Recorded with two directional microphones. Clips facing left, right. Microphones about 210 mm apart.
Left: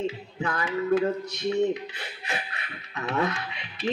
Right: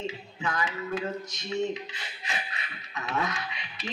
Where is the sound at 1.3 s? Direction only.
60° left (ahead or behind).